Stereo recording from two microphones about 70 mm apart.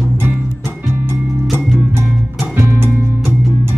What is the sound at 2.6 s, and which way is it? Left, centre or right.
Music, right.